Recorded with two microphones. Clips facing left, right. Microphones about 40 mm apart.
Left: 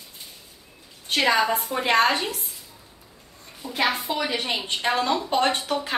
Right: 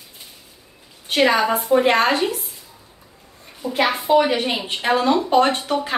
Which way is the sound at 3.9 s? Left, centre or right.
Right.